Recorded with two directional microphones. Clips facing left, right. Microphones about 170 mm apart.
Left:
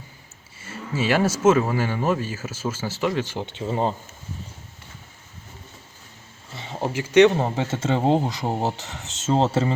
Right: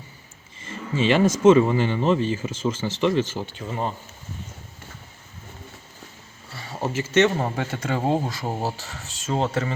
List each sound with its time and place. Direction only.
0.6 s speech: 10° left (ahead or behind); by 3.9 s 30° left (ahead or behind)
6.5 s speech: 20° left (ahead or behind)